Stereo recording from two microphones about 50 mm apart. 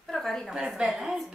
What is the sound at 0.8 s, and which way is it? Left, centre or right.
Speech, centre.